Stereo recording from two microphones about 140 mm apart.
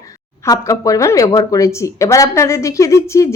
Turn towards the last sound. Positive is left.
turn(degrees=20)  # may be behind; listen again after turning